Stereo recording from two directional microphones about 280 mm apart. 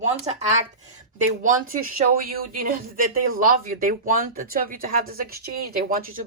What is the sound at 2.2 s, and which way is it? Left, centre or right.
Speech, right.